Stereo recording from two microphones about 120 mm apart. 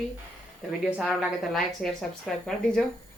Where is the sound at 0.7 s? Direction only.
10° right (ahead or behind).